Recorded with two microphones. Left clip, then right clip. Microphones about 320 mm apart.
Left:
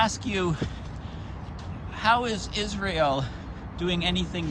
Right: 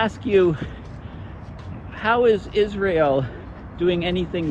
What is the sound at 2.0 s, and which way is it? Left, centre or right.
Speech, centre.